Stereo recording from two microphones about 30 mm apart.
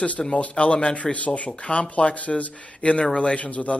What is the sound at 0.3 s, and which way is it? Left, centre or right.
Speech, left.